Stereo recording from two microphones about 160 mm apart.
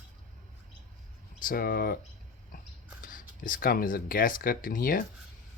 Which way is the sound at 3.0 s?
60° left (ahead or behind).